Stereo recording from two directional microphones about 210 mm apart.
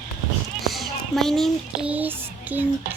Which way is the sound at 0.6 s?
Centre (ahead or behind).